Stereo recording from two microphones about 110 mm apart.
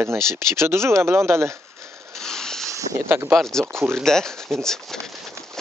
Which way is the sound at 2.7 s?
30° right (ahead or behind).